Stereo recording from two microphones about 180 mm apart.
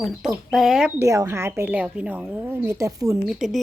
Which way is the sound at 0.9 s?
15° right (ahead or behind).